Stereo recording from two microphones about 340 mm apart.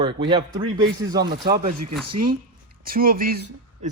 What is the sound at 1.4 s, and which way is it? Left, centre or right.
Speech, right.